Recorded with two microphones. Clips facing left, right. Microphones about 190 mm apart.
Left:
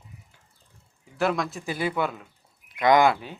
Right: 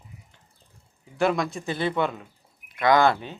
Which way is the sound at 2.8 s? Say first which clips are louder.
Left 1 dB; 15° left (ahead or behind).